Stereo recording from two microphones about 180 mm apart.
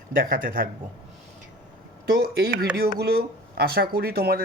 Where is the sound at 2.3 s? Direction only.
60° right (ahead or behind).